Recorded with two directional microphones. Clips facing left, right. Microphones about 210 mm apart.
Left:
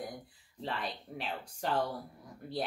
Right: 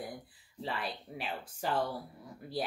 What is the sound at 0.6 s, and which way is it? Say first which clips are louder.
Speech: even; 5° right (ahead or behind).